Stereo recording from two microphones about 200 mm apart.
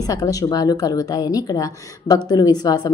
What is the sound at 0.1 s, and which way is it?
A woman's voice, 20° left (ahead or behind).